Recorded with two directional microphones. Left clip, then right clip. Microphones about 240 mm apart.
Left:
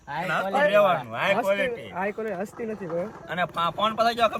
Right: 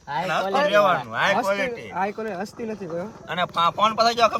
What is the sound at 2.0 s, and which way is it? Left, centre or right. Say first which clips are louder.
Speech: right 4 dB; centre.